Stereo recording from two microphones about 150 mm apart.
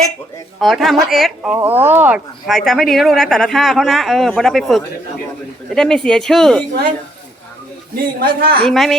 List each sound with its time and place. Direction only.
0.6 s speech: centre (ahead or behind)
1.4 s speech: 10° right (ahead or behind); by 6.7 s 5° left (ahead or behind)
8.2 s a woman's voice: 90° right
8.6 s speech: centre (ahead or behind)